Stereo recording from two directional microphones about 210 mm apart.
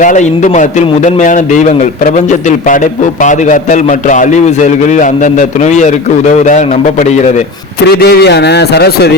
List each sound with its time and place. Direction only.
0.0 s a man's voice: 35° left (ahead or behind)
7.9 s a man's voice: 50° left (ahead or behind)